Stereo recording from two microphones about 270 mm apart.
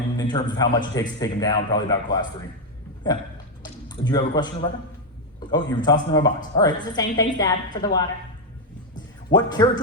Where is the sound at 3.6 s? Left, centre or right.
Centre.